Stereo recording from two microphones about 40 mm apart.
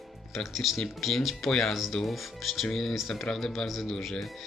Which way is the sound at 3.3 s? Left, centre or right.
Centre.